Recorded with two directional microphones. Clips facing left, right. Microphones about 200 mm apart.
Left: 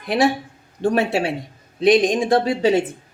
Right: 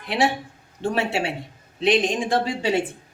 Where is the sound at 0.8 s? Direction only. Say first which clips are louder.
Left 5 dB; 35° left (ahead or behind).